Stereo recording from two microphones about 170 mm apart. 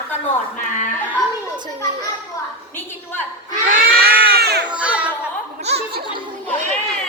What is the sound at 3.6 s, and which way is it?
Crowd, 55° right (ahead or behind).